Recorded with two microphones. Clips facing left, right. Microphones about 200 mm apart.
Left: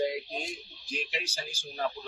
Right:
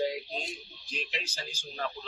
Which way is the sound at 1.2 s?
10° left (ahead or behind).